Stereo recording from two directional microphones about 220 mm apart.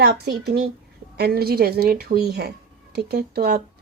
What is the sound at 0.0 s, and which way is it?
Speech, 45° right (ahead or behind).